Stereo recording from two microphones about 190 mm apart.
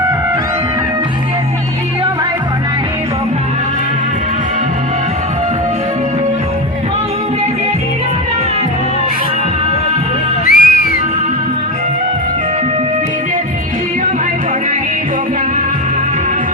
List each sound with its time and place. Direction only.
10.4 s music: 55° left (ahead or behind)